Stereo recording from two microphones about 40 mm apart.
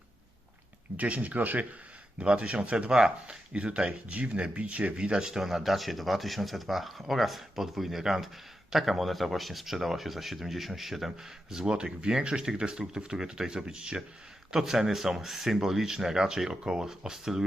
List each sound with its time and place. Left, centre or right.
0.9 s speech: right
2.2 s speech: right
5.3 s speech: centre
11.5 s speech: centre
14.5 s speech: centre